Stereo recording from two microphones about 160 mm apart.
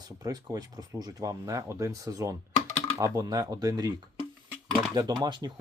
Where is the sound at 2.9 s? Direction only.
20° right (ahead or behind).